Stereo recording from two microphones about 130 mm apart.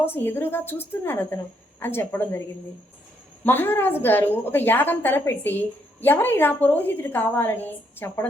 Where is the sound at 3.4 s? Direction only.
15° left (ahead or behind).